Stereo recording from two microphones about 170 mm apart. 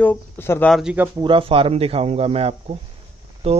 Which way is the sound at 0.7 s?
10° right (ahead or behind).